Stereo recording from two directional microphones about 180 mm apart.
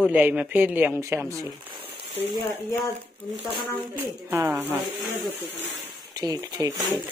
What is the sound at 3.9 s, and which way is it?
Speech, 15° right (ahead or behind).